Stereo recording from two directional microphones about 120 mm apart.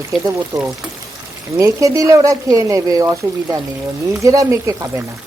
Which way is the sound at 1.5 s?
25° right (ahead or behind).